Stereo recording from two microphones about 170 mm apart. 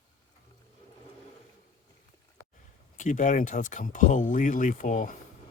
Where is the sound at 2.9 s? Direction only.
50° left (ahead or behind).